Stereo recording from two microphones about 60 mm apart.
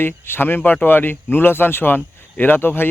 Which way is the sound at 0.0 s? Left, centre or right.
Left.